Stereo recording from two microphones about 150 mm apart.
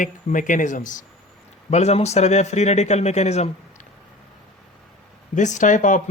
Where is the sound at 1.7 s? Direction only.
45° left (ahead or behind).